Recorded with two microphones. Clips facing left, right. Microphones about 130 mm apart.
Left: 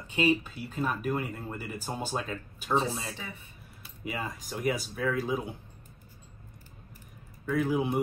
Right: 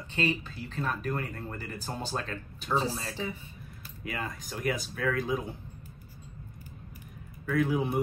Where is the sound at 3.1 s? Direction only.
30° right (ahead or behind).